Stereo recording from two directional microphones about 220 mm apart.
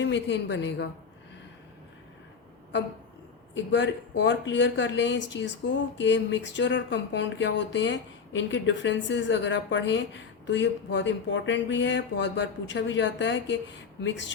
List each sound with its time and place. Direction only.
0.0 s a woman's voice: 55° left (ahead or behind)
3.5 s speech: 55° left (ahead or behind)